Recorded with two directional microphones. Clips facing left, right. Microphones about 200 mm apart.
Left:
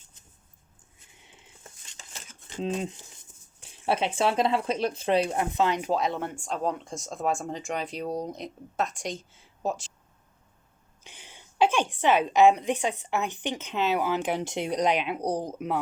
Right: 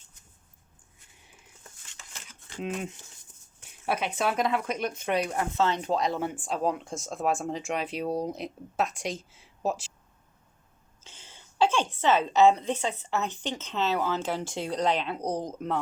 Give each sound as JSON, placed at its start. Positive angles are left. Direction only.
{"t": 1.1, "sound": "a sound", "side_deg": 25}
{"t": 3.6, "sound": "speech", "side_deg": 30}
{"t": 11.0, "sound": "a woman's voice", "side_deg": 15}